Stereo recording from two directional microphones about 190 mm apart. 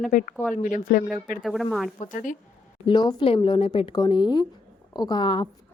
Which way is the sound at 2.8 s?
25° left (ahead or behind).